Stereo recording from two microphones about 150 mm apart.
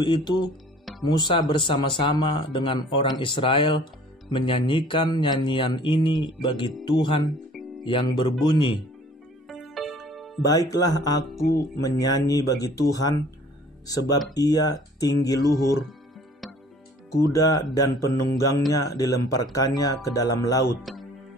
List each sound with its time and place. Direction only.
0.0 s speech: 30° left (ahead or behind)
9.5 s music: centre (ahead or behind)
10.4 s speech: 25° left (ahead or behind)
17.3 s speech: 25° left (ahead or behind)
20.8 s music: centre (ahead or behind)